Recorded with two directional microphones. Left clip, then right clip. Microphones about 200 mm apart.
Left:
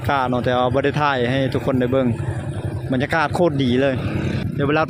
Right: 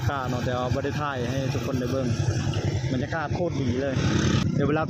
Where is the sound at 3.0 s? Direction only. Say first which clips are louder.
Left 12 dB; 35° left (ahead or behind).